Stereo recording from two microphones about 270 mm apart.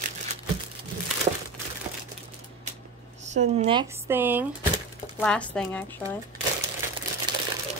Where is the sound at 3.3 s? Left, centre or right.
Right.